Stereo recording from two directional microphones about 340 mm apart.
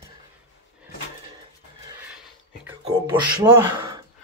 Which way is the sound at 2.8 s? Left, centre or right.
Centre.